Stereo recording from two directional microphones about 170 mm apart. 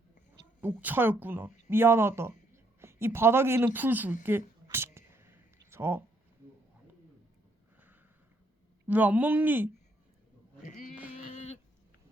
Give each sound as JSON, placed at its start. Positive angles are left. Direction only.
{"t": 0.6, "sound": "speech", "side_deg": -10}
{"t": 8.9, "sound": "speech", "side_deg": -10}
{"t": 11.2, "sound": "a sound", "side_deg": 45}